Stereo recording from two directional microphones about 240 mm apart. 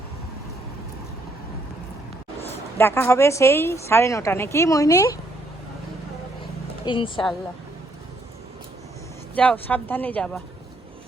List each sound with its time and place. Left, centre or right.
2.7 s speech: centre
6.8 s a woman's voice: left
9.3 s speech: centre